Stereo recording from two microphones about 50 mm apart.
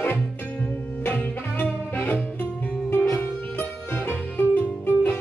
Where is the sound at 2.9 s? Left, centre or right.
Left.